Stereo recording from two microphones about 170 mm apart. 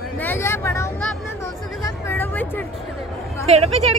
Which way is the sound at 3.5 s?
35° right (ahead or behind).